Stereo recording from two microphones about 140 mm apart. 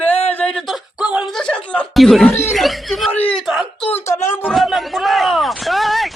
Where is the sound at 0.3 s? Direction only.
10° left (ahead or behind); by 1.2 s 5° right (ahead or behind).